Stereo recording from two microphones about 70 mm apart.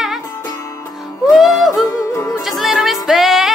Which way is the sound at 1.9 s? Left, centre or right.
Left.